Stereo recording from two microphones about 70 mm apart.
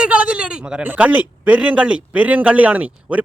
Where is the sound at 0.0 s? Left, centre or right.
Centre.